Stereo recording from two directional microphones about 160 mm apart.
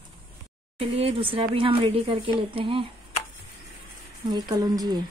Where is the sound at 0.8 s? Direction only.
35° right (ahead or behind).